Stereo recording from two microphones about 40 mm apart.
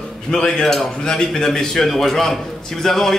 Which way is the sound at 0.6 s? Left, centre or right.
Centre.